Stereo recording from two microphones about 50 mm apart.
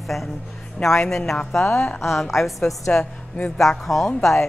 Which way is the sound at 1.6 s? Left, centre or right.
Left.